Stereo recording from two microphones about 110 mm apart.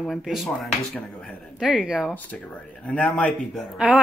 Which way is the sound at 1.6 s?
5° right (ahead or behind).